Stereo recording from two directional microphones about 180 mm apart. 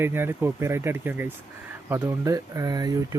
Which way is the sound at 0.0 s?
10° right (ahead or behind).